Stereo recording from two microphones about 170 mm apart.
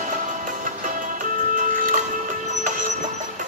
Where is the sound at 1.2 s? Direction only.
50° right (ahead or behind).